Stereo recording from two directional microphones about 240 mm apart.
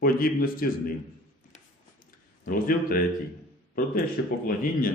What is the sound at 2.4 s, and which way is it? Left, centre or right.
Speech, left.